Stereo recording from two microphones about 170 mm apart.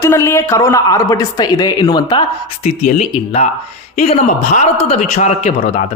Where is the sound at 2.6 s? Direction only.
45° left (ahead or behind).